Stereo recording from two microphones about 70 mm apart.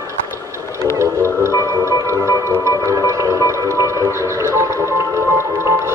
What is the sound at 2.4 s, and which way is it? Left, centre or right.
Music, right.